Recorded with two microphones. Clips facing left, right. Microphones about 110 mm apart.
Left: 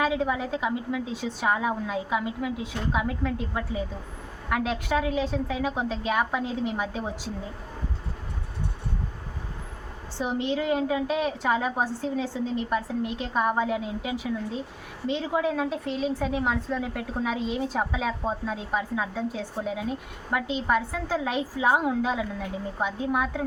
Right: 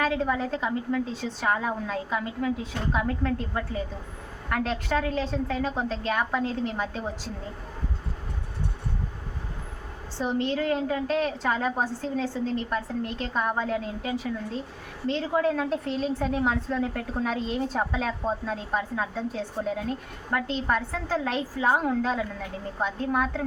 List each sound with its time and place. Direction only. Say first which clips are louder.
0.0 s a woman's voice: even; 10° left (ahead or behind)
10.2 s a woman's voice: right 1 dB; 10° left (ahead or behind)